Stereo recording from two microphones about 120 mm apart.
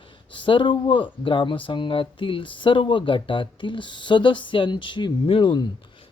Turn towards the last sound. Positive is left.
turn(degrees=40)  # may be behind; listen again after turning